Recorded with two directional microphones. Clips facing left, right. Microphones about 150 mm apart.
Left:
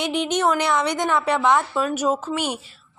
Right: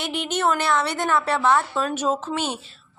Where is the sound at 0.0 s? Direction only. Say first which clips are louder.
Left 3 dB; 15° left (ahead or behind).